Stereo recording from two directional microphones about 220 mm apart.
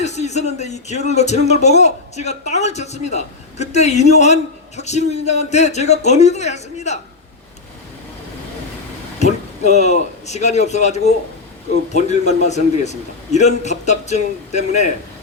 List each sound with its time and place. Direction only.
0.0 s speech: 30° left (ahead or behind)
9.1 s a man's voice: 30° left (ahead or behind)